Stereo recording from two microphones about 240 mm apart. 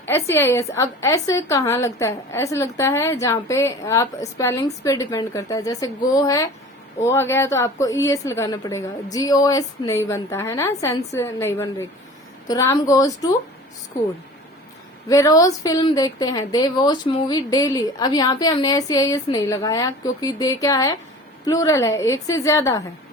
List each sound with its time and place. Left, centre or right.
0.0 s a woman's voice: centre
15.1 s a woman's voice: centre